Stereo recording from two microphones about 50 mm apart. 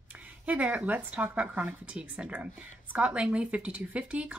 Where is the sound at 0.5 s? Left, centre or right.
Right.